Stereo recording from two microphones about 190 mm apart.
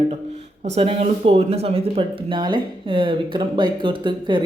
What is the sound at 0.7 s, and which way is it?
Speech, 35° right (ahead or behind).